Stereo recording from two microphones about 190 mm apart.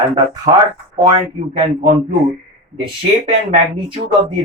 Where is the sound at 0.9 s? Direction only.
20° right (ahead or behind).